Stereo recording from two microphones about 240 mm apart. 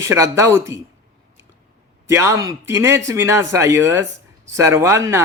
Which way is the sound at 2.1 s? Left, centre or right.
Centre.